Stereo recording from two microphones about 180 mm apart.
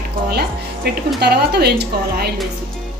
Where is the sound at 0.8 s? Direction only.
65° right (ahead or behind).